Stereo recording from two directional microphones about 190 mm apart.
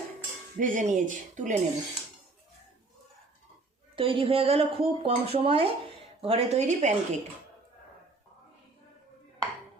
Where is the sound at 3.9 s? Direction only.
30° right (ahead or behind).